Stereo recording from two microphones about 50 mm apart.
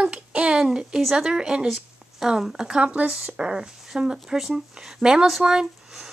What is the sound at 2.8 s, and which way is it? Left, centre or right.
Speech, right.